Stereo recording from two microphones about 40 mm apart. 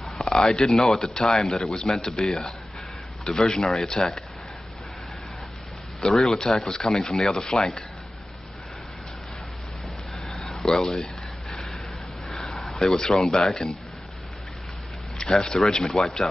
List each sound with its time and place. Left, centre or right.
0.0 s speech: centre
6.1 s speech: centre
10.5 s speech: centre
11.5 s vehicle: centre
12.3 s a sound: centre
12.9 s speech: centre
15.1 s speech: centre